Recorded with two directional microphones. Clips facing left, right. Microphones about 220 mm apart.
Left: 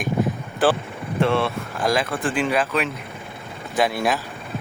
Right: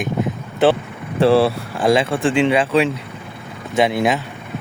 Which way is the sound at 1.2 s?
35° right (ahead or behind).